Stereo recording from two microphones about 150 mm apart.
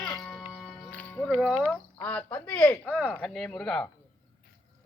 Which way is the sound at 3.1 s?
5° left (ahead or behind).